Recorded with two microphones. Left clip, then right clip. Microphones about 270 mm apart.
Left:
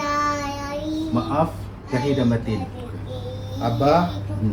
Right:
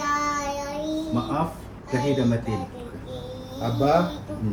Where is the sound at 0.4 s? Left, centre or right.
Right.